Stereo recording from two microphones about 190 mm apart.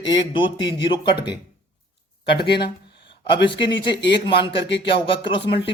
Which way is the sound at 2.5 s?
60° left (ahead or behind).